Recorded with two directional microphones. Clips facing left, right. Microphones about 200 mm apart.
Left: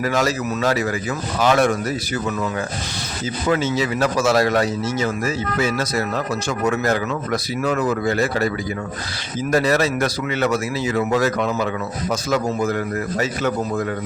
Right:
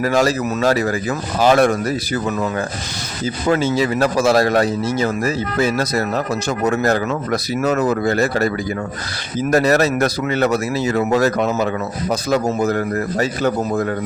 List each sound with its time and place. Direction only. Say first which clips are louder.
0.0 s speech: right 4 dB; 35° right (ahead or behind)
3.5 s speech: right 3 dB; 35° right (ahead or behind)
9.5 s speech: right 3 dB; 45° right (ahead or behind)